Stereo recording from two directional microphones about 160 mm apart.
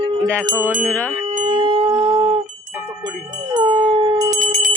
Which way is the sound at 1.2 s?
30° right (ahead or behind).